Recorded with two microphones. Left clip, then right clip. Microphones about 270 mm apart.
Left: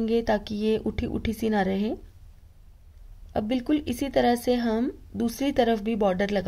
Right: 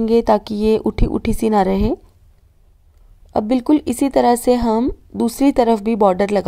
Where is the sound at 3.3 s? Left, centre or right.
Right.